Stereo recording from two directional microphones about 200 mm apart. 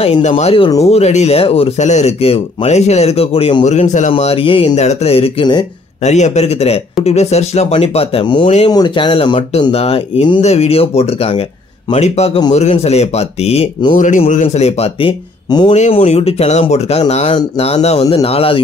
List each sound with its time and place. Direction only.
0.0 s speech: 35° left (ahead or behind)
6.0 s speech: 35° left (ahead or behind)
13.9 s speech: 40° left (ahead or behind); by 15.7 s 25° left (ahead or behind)
15.7 s speech: 35° left (ahead or behind)